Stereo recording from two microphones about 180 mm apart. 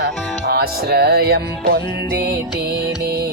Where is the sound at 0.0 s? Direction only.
65° right (ahead or behind).